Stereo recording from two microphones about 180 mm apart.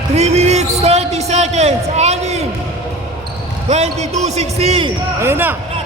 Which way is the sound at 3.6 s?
35° right (ahead or behind).